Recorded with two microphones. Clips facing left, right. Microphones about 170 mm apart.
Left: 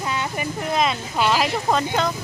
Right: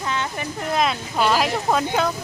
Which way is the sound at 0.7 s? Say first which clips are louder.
Right 1 dB; centre (ahead or behind).